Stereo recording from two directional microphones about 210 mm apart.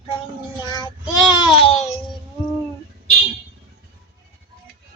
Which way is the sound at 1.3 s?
25° left (ahead or behind).